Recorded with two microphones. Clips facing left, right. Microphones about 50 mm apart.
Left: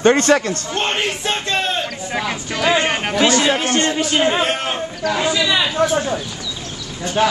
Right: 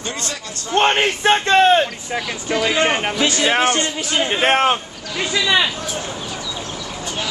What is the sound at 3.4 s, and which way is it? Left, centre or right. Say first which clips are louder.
A man's voice: even; right.